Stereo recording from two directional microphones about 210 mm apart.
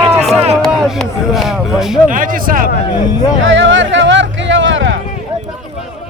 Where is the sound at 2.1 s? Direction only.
40° right (ahead or behind).